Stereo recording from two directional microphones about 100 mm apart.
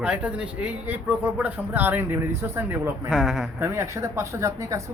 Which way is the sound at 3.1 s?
5° right (ahead or behind).